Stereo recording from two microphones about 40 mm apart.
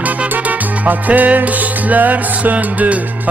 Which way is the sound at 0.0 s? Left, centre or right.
Right.